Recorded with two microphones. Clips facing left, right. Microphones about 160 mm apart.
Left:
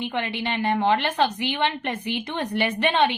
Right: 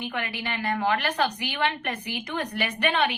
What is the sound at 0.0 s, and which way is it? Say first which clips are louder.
Speech: left 4 dB; 25° left (ahead or behind).